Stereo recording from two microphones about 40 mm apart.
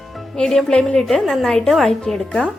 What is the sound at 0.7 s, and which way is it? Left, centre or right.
Speech, left.